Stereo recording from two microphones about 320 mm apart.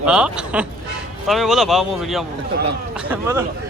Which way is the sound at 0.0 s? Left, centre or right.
Centre.